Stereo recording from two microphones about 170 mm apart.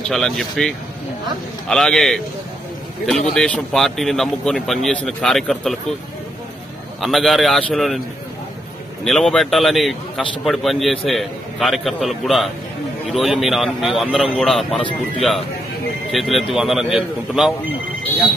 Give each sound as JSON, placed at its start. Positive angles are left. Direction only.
{"t": 0.1, "sound": "a man's voice", "side_deg": 0}
{"t": 7.0, "sound": "a man's voice", "side_deg": 0}
{"t": 9.0, "sound": "a man's voice", "side_deg": 0}
{"t": 14.8, "sound": "speech", "side_deg": 30}
{"t": 16.1, "sound": "a man's voice", "side_deg": 0}